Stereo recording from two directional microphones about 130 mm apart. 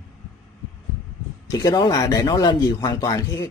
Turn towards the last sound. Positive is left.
turn(degrees=30)  # may be behind; listen again after turning